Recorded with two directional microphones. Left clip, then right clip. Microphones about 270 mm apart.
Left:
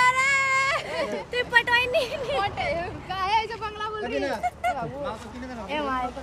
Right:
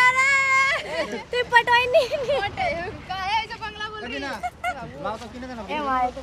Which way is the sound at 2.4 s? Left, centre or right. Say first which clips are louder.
Right 1 dB; centre.